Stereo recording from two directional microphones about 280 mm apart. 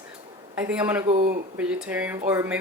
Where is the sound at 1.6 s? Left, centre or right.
Centre.